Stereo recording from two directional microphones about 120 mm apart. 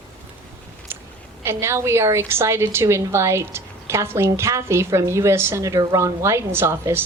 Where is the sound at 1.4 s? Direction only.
20° right (ahead or behind).